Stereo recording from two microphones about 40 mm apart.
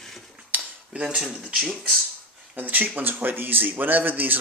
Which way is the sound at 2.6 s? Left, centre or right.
Right.